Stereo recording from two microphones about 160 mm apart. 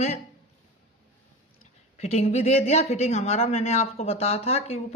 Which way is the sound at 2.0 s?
40° left (ahead or behind).